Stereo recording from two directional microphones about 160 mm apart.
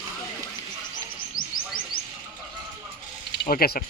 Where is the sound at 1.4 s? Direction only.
65° left (ahead or behind).